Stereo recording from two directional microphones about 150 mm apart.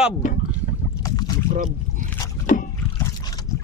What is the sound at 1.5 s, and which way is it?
Boat, 60° right (ahead or behind).